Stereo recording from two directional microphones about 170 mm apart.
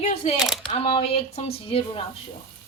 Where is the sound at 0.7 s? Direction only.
35° left (ahead or behind).